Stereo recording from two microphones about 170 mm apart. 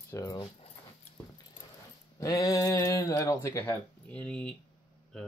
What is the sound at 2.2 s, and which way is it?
Speech, 20° left (ahead or behind).